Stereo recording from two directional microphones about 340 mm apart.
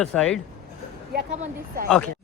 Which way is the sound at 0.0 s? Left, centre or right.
Centre.